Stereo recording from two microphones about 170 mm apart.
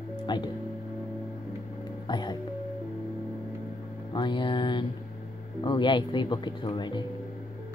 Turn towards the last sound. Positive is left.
turn(degrees=25)  # may be behind; listen again after turning